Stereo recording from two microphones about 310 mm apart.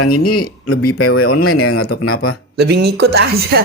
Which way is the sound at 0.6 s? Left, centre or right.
Left.